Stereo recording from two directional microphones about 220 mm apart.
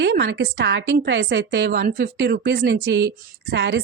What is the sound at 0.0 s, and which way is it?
A woman's voice, 55° right (ahead or behind).